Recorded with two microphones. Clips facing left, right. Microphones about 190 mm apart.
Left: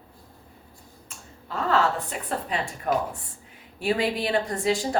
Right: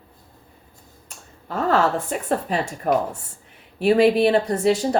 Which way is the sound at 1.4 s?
45° right (ahead or behind).